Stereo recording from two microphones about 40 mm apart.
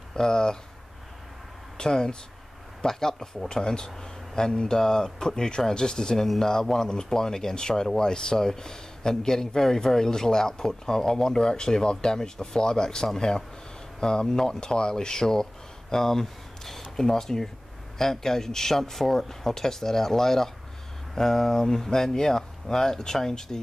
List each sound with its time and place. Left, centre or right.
0.1 s speech: centre
1.8 s speech: centre
15.9 s a sound: centre
16.9 s speech: centre